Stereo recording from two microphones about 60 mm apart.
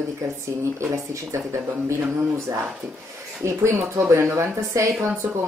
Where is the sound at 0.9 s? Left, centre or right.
Right.